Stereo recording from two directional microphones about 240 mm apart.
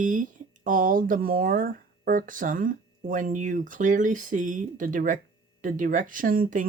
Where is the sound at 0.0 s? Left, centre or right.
Right.